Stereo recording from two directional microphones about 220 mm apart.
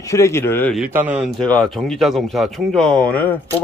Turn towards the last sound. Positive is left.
turn(degrees=5)  # may be behind; listen again after turning